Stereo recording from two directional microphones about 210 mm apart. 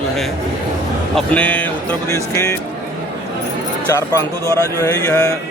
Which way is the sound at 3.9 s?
15° left (ahead or behind).